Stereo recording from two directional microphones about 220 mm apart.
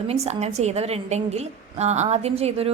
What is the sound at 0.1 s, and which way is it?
A woman's voice, 30° right (ahead or behind).